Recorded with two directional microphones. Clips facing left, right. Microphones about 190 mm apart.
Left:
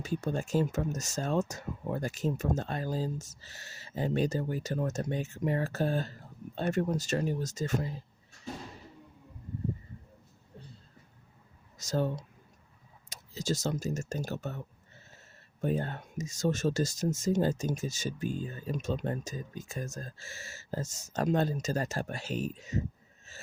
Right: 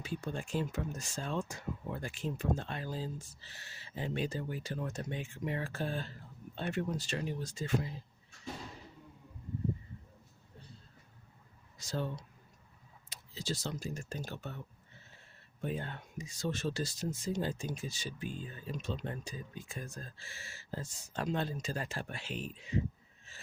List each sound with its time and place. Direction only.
0.0 s speech: 45° left (ahead or behind)
11.8 s speech: 45° left (ahead or behind)
15.6 s speech: 45° left (ahead or behind)
23.3 s a sound: 45° left (ahead or behind)